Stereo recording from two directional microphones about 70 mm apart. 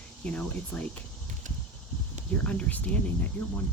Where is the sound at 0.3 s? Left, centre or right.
Centre.